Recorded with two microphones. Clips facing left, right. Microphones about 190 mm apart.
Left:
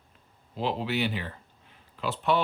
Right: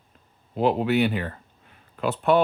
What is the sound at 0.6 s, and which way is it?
Speech, 55° right (ahead or behind).